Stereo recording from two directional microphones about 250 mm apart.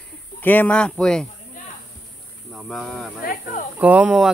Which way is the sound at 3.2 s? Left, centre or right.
Left.